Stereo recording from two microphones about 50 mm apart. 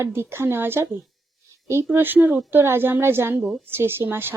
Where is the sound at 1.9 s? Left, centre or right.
Right.